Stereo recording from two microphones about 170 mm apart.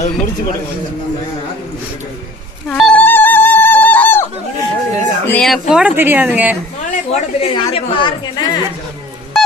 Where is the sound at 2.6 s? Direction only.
5° left (ahead or behind).